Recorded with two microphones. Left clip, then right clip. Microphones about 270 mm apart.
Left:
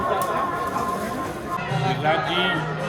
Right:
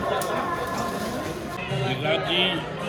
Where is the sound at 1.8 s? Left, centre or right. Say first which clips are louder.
Left 3 dB; left.